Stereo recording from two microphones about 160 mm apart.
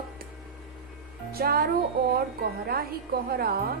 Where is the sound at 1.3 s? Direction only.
70° right (ahead or behind).